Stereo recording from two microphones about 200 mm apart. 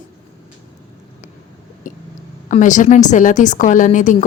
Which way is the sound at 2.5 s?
40° left (ahead or behind).